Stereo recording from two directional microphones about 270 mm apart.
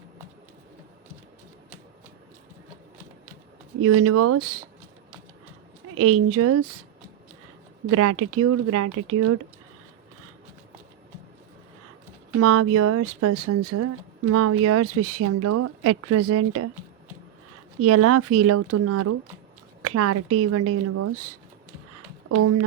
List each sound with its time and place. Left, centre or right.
3.8 s speech: right
5.9 s speech: right
7.9 s speech: right
12.4 s speech: right
17.7 s speech: right
22.4 s speech: right